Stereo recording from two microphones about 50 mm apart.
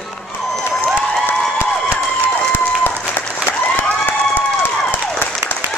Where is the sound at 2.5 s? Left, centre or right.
Left.